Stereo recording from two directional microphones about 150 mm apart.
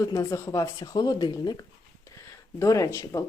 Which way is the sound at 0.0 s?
20° left (ahead or behind).